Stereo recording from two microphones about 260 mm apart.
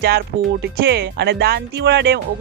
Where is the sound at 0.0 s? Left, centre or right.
Right.